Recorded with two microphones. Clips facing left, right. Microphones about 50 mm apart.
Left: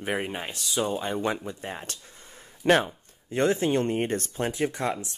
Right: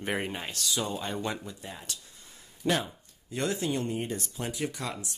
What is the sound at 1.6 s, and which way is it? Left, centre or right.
Speech, left.